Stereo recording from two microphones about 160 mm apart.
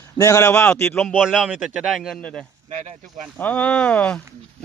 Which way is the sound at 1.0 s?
5° right (ahead or behind).